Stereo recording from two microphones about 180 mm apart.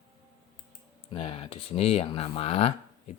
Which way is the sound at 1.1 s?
35° left (ahead or behind).